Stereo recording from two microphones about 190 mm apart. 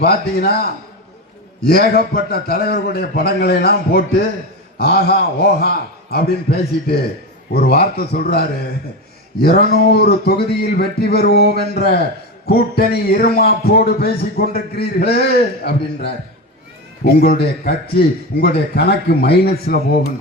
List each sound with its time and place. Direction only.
0.0 s a man's voice: 55° left (ahead or behind)